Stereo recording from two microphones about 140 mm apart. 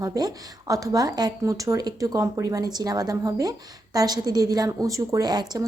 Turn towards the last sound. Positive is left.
turn(degrees=-30)  # may be behind; listen again after turning